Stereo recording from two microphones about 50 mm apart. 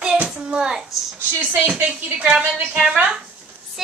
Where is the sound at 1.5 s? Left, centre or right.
Right.